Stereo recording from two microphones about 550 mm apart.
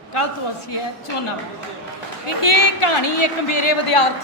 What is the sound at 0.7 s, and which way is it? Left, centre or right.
A woman's voice, left.